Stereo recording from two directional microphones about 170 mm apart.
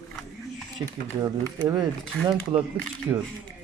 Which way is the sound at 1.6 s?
25° right (ahead or behind).